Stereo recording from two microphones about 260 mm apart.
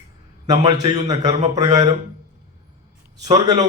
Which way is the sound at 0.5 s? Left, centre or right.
Centre.